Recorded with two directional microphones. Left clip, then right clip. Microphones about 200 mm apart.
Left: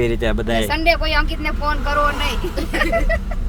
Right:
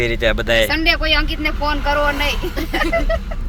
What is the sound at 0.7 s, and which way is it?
Speech, 40° right (ahead or behind).